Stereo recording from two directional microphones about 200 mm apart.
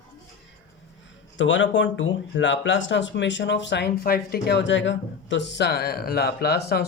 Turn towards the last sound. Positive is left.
turn(degrees=50)  # may be behind; listen again after turning